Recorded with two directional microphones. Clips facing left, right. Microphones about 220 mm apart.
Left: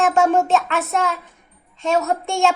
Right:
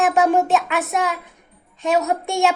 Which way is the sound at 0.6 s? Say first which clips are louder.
Even; 15° right (ahead or behind).